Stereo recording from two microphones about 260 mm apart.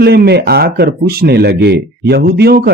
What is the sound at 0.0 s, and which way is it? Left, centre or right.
Speech, right.